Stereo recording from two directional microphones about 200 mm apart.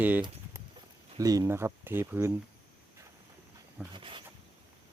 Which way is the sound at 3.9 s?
25° right (ahead or behind).